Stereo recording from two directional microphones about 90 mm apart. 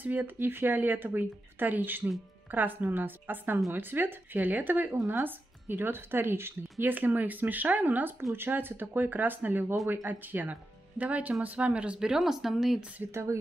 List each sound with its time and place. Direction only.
0.0 s a woman's voice: 20° right (ahead or behind); by 12.8 s 5° right (ahead or behind)
13.0 s a woman's voice: 30° right (ahead or behind)